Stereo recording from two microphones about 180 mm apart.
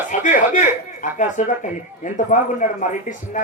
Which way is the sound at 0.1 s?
45° left (ahead or behind).